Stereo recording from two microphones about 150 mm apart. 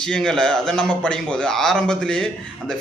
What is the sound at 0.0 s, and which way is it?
A man's voice, 5° left (ahead or behind).